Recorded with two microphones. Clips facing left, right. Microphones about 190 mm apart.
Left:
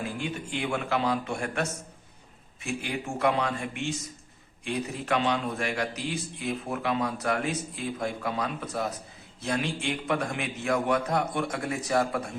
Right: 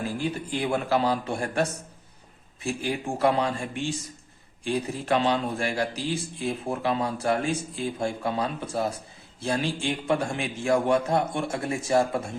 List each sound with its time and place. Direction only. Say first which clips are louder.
0.0 s a man's voice: right 4 dB; 35° right (ahead or behind)